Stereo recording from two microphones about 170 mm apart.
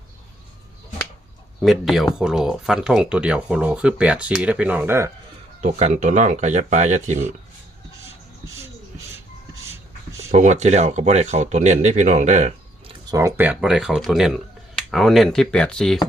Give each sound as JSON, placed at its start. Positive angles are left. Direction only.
{"t": 1.6, "sound": "speech", "side_deg": 0}
{"t": 5.5, "sound": "speech", "side_deg": -45}
{"t": 10.2, "sound": "speech", "side_deg": -45}
{"t": 13.1, "sound": "speech", "side_deg": -15}